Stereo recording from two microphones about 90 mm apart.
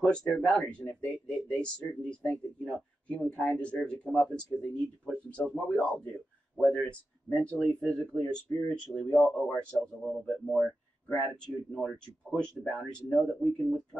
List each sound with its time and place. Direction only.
0.0 s speech: 5° left (ahead or behind)
7.4 s speech: 10° left (ahead or behind)